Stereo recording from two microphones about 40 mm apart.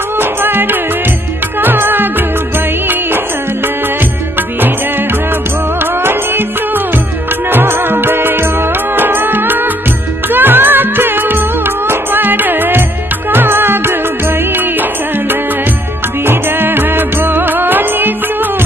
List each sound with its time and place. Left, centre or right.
0.2 s music: right
6.0 s music: right
14.5 s music: right